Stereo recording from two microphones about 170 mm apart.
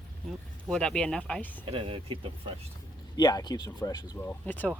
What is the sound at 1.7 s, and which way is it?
Speech, 30° right (ahead or behind).